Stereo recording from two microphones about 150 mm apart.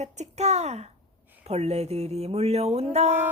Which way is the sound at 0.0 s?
50° right (ahead or behind).